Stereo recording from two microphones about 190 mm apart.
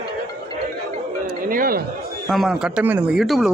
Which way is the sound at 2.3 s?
Centre (ahead or behind).